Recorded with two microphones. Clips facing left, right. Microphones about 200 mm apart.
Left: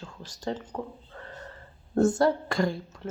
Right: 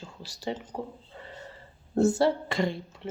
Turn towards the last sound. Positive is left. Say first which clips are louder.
# left 1 dB
turn(degrees=0)  # may be behind; listen again after turning